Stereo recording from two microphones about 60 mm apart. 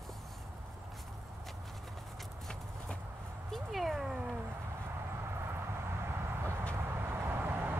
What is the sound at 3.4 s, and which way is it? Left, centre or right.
Dog, centre.